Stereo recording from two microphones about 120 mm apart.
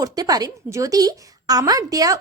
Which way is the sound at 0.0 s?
30° right (ahead or behind).